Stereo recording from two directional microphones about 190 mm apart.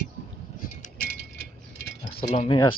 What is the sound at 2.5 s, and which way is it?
Speech, 25° left (ahead or behind).